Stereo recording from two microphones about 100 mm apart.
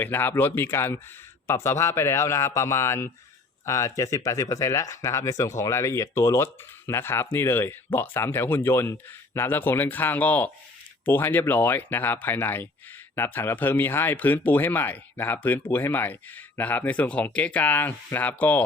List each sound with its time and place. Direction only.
0.0 s speech: 20° left (ahead or behind)